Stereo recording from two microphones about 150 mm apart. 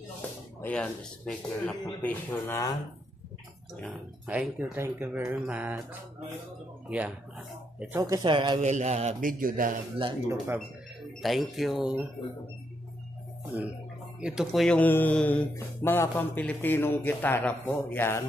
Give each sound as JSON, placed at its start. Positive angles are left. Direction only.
{"t": 0.6, "sound": "speech", "side_deg": 10}
{"t": 2.4, "sound": "speech", "side_deg": 20}
{"t": 3.8, "sound": "speech", "side_deg": 0}
{"t": 6.9, "sound": "speech", "side_deg": -10}
{"t": 8.0, "sound": "speech", "side_deg": -25}
{"t": 8.5, "sound": "a man's voice", "side_deg": -50}
{"t": 9.3, "sound": "a man's voice", "side_deg": -65}
{"t": 10.2, "sound": "speech", "side_deg": -15}
{"t": 11.2, "sound": "speech", "side_deg": 0}
{"t": 13.5, "sound": "speech", "side_deg": -10}